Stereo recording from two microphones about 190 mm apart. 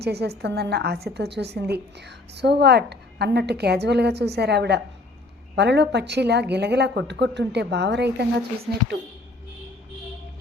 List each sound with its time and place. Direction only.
0.0 s a woman's voice: 60° right (ahead or behind)